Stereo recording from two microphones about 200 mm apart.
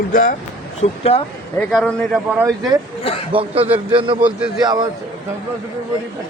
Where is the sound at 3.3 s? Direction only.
30° right (ahead or behind).